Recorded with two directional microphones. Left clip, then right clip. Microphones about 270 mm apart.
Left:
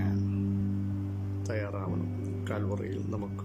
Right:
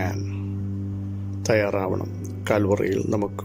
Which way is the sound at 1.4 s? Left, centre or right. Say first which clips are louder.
Right 15 dB; right.